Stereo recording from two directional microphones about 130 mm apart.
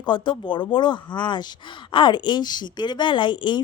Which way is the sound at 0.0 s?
35° left (ahead or behind).